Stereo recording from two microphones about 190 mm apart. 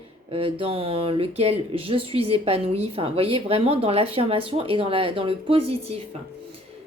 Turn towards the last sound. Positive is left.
turn(degrees=-30)  # may be behind; listen again after turning